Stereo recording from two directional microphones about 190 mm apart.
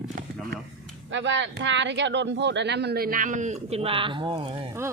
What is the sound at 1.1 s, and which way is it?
Speech, 70° right (ahead or behind).